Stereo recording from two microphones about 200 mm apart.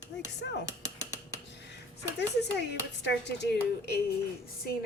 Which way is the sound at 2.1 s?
60° left (ahead or behind).